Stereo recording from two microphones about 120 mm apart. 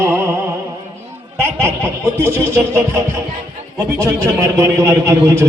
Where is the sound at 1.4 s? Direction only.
20° right (ahead or behind).